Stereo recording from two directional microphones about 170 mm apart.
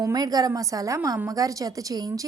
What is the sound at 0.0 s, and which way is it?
A woman's voice, 20° right (ahead or behind).